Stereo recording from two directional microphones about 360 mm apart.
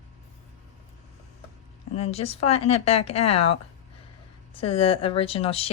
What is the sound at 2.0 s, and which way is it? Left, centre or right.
A woman's voice, centre.